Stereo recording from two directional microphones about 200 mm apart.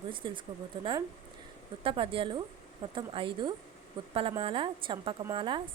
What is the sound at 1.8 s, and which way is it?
Speech, 25° right (ahead or behind).